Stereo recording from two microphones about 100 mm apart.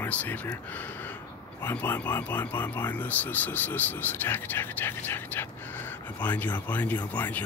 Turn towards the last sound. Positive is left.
turn(degrees=15)  # may be behind; listen again after turning